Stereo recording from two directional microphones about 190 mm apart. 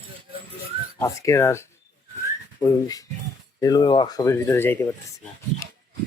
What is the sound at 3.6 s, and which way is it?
Speech, 20° left (ahead or behind).